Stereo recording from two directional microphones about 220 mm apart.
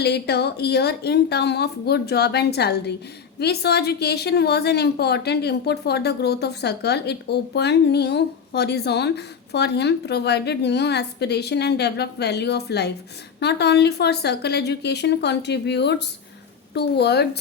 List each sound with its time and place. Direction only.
0.0 s a woman's voice: 50° left (ahead or behind)